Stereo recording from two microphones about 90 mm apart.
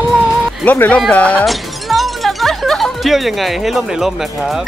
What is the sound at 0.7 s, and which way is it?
Speech, 15° left (ahead or behind).